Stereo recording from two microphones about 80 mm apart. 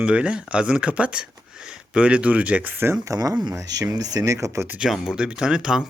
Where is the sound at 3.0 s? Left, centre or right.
Right.